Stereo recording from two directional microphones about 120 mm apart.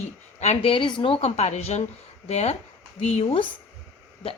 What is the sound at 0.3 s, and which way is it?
A woman's voice, 65° left (ahead or behind).